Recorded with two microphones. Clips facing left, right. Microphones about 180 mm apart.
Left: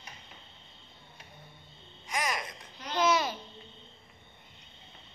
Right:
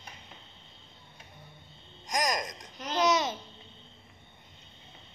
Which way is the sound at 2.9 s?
20° right (ahead or behind).